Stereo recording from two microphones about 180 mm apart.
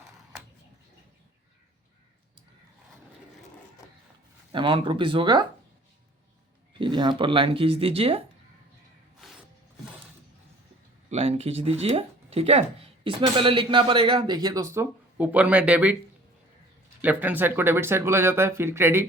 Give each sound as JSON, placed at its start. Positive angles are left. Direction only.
{"t": 4.5, "sound": "speech", "side_deg": -25}
{"t": 6.7, "sound": "speech", "side_deg": -25}
{"t": 11.1, "sound": "speech", "side_deg": -35}
{"t": 17.0, "sound": "speech", "side_deg": -10}